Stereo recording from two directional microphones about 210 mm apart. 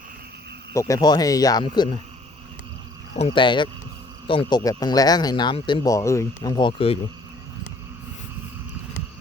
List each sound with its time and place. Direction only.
0.7 s speech: 15° left (ahead or behind)
3.2 s speech: 25° left (ahead or behind)